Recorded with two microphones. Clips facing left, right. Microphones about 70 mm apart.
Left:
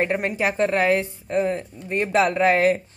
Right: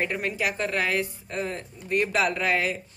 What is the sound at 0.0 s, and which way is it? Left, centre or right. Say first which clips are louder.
Speech: left 5 dB; left.